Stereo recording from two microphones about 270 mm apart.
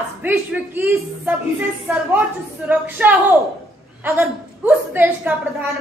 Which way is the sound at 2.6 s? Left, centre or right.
Centre.